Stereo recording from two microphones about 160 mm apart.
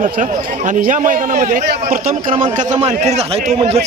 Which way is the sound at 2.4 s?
50° right (ahead or behind).